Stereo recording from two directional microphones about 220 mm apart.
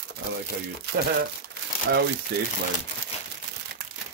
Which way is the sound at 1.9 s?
45° right (ahead or behind).